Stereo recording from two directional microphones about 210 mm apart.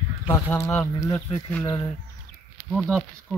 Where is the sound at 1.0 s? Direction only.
15° left (ahead or behind).